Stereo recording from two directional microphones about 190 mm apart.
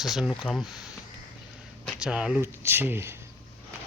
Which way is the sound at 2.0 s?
5° right (ahead or behind).